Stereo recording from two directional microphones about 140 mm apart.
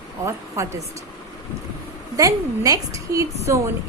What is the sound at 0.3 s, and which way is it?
Speech, 20° right (ahead or behind).